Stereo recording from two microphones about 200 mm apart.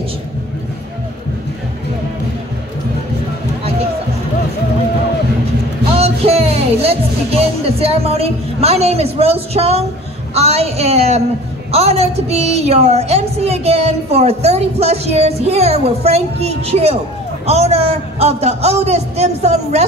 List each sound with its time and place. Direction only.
5.9 s music: 30° right (ahead or behind)
10.3 s a woman's voice: 30° right (ahead or behind)